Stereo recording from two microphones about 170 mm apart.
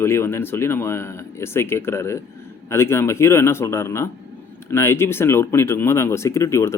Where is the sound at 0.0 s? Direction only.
15° left (ahead or behind).